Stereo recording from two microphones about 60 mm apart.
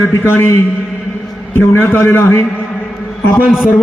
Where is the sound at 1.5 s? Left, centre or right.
Left.